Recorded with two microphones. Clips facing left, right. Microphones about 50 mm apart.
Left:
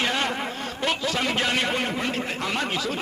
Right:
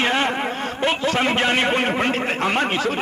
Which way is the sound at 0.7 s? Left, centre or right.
Right.